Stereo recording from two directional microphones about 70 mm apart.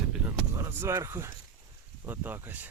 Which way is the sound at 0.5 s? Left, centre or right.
Right.